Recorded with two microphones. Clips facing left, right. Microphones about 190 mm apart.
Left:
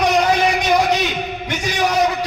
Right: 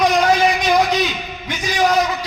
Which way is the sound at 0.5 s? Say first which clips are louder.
Even; 60° left (ahead or behind).